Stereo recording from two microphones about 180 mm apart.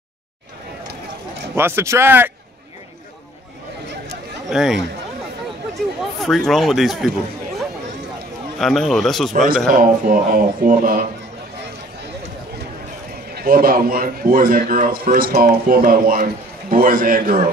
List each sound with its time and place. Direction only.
1.5 s speech: 15° right (ahead or behind)
4.5 s speech: centre (ahead or behind)
8.5 s speech: centre (ahead or behind)
9.7 s a man's voice: 50° right (ahead or behind)
13.3 s a man's voice: 55° right (ahead or behind)